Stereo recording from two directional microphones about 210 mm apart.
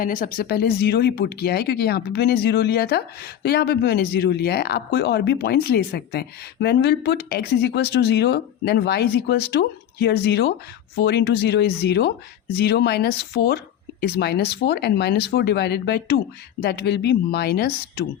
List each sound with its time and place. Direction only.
0.0 s speech: 40° left (ahead or behind)